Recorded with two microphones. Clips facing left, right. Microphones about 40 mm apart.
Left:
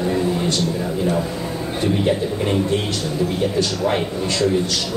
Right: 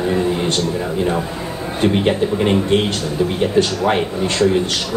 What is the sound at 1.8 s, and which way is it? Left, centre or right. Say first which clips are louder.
Speech: right 4 dB; right.